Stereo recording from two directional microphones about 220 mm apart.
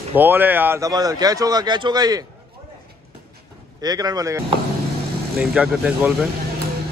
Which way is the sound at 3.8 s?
15° right (ahead or behind).